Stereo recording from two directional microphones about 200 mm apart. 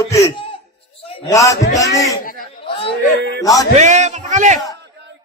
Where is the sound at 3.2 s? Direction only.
60° right (ahead or behind).